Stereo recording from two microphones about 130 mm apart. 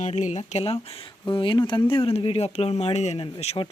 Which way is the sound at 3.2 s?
50° left (ahead or behind).